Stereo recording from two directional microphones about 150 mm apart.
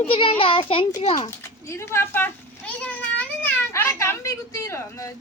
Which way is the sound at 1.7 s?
15° left (ahead or behind).